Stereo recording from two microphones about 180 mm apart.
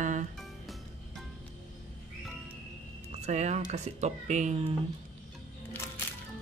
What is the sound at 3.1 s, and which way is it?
Speech, 40° right (ahead or behind).